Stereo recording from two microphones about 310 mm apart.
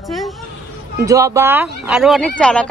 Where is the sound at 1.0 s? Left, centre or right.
Centre.